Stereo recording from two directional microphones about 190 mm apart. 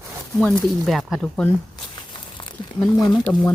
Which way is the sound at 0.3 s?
5° left (ahead or behind).